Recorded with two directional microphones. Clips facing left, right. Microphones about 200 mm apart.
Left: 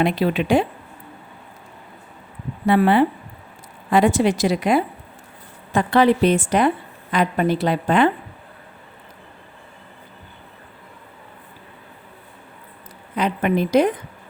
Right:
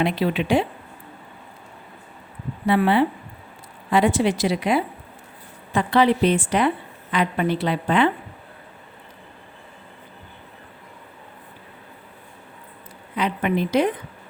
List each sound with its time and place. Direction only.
0.0 s a woman's voice: 45° left (ahead or behind)
2.6 s a woman's voice: 50° left (ahead or behind)
13.1 s a woman's voice: 45° left (ahead or behind)